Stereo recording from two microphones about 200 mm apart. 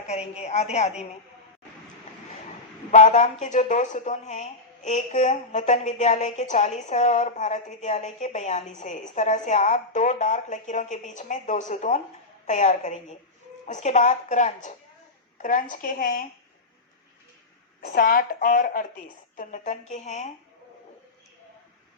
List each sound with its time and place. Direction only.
0.1 s a woman's voice: 35° left (ahead or behind)
2.9 s a woman's voice: 35° left (ahead or behind)
17.7 s a woman's voice: 45° left (ahead or behind)